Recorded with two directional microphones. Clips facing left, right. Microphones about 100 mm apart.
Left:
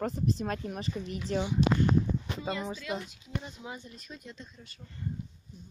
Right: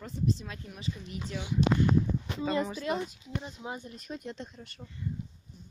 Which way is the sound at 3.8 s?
50° right (ahead or behind).